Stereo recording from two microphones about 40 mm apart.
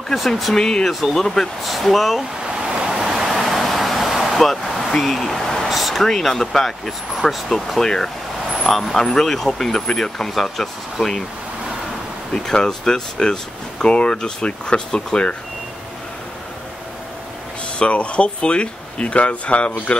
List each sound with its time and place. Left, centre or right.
0.6 s speech: centre
1.6 s speech: centre
2.4 s vehicle: centre
4.9 s speech: centre
5.7 s speech: centre
6.0 s speech: centre
7.8 s speech: centre
12.4 s speech: centre
17.7 s speech: left